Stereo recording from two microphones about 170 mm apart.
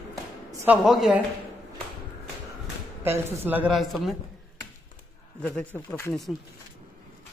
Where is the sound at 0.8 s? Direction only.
Centre (ahead or behind).